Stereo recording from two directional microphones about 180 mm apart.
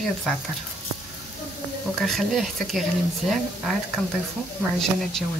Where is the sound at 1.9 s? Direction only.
Centre (ahead or behind).